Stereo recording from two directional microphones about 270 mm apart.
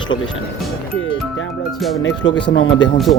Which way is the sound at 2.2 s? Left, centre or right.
Left.